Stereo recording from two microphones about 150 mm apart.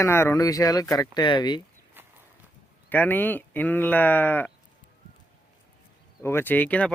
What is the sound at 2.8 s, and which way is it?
Speech, 10° left (ahead or behind).